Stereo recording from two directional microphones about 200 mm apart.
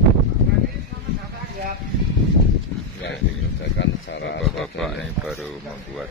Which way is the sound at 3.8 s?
60° left (ahead or behind).